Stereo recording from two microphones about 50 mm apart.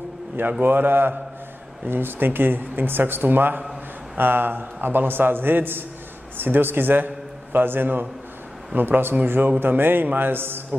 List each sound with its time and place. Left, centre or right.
0.4 s speech: right